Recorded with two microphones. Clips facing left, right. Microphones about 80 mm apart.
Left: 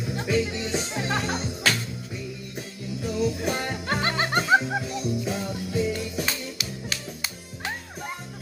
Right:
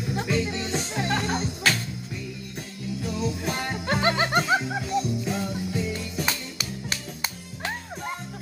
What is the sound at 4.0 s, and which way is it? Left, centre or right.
Music, centre.